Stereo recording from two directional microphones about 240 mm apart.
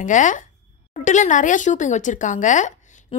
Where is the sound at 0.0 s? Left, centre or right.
Left.